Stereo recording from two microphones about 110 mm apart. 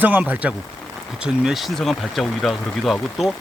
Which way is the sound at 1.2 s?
5° right (ahead or behind).